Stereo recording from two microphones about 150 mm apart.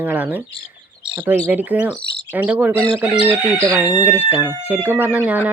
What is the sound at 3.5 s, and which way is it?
Speech, 25° right (ahead or behind).